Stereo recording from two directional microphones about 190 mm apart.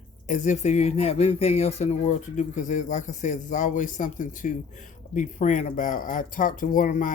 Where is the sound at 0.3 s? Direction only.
40° left (ahead or behind).